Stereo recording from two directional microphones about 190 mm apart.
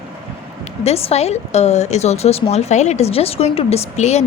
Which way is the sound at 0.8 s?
35° left (ahead or behind).